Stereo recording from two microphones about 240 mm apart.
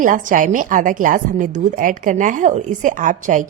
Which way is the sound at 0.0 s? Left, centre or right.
Right.